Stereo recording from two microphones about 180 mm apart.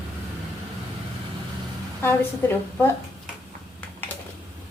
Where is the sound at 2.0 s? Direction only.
15° left (ahead or behind).